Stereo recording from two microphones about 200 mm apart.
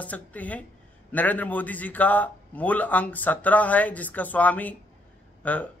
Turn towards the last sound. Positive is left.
turn(degrees=5)  # may be behind; listen again after turning